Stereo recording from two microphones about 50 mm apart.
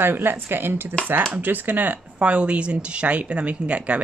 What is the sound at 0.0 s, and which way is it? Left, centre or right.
Speech, right.